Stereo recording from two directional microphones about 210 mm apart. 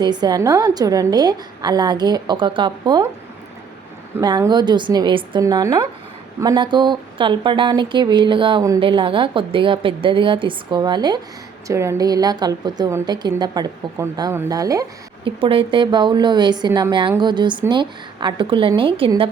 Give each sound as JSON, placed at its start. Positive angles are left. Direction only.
{"t": 0.0, "sound": "a woman's voice", "side_deg": -20}
{"t": 4.2, "sound": "a woman's voice", "side_deg": -20}